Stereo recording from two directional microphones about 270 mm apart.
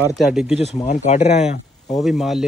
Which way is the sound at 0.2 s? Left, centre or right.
Centre.